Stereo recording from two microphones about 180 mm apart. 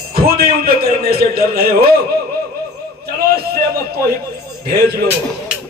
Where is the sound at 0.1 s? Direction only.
60° right (ahead or behind).